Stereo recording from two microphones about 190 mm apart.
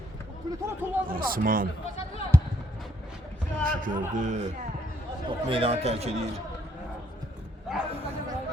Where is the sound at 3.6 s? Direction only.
45° right (ahead or behind).